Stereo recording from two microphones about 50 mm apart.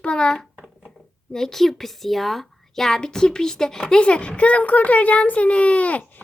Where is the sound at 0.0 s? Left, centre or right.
Centre.